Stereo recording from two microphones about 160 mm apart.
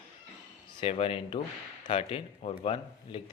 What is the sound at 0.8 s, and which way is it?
Speech, 35° left (ahead or behind).